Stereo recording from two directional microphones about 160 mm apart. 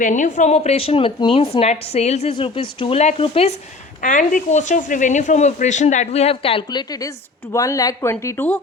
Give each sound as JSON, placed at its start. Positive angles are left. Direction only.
{"t": 0.0, "sound": "speech", "side_deg": 50}
{"t": 4.0, "sound": "a woman's voice", "side_deg": 55}